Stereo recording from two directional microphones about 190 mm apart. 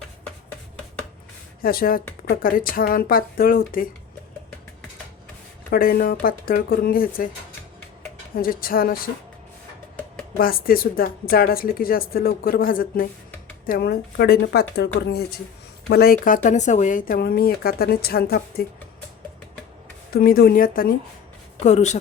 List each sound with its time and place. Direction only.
1.6 s speech: 50° left (ahead or behind)
5.7 s speech: 50° left (ahead or behind)
8.4 s speech: 50° left (ahead or behind)
10.3 s speech: 50° left (ahead or behind)
20.1 s speech: 50° left (ahead or behind)
21.6 s speech: 40° left (ahead or behind)